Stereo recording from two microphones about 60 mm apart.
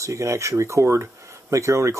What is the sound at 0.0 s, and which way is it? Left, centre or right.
Speech, right.